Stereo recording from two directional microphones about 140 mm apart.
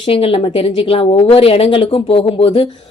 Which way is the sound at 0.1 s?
40° left (ahead or behind).